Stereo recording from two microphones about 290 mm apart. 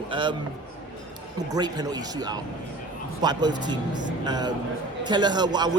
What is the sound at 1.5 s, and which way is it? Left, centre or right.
A man's voice, centre.